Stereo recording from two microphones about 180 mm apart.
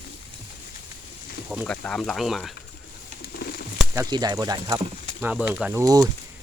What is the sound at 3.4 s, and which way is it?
Bird, 60° left (ahead or behind).